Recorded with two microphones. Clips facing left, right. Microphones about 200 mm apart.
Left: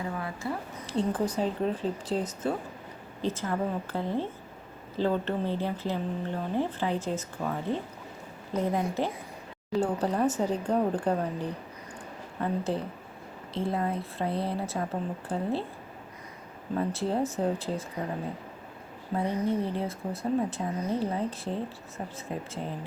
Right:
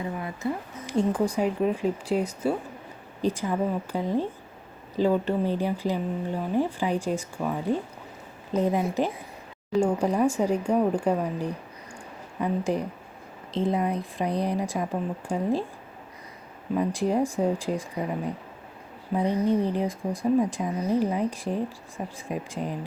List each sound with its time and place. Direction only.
0.0 s a woman's voice: 20° right (ahead or behind)
16.7 s speech: 15° right (ahead or behind)